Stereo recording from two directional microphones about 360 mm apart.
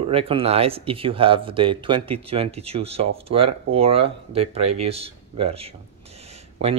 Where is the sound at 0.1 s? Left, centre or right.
Centre.